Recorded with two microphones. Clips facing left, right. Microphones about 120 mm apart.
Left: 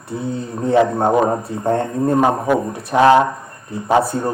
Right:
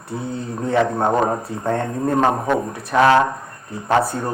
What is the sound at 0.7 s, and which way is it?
A man's voice, 25° left (ahead or behind).